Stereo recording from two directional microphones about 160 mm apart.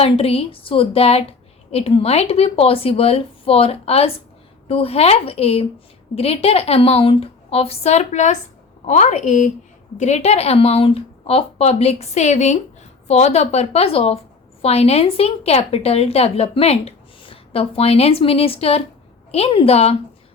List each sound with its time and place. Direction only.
0.0 s a woman's voice: 40° left (ahead or behind)